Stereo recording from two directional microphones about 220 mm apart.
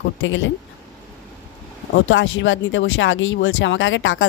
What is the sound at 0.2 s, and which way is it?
Speech, 60° left (ahead or behind).